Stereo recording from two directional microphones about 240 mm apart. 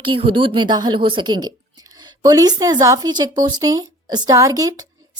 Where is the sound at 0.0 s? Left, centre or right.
Right.